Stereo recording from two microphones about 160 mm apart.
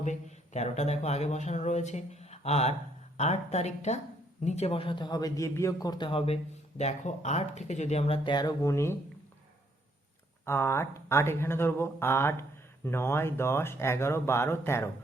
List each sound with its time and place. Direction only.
0.0 s a man's voice: 45° left (ahead or behind); by 9.0 s 15° left (ahead or behind)
10.4 s speech: 15° left (ahead or behind)